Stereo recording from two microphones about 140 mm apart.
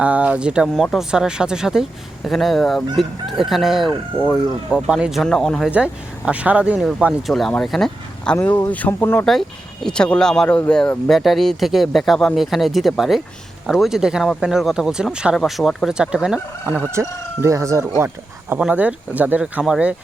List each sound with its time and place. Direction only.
0.0 s speech: 10° right (ahead or behind)
5.7 s speech: 10° right (ahead or behind)
8.4 s speech: 15° left (ahead or behind); by 16.8 s 5° right (ahead or behind)
16.9 s speech: 20° right (ahead or behind)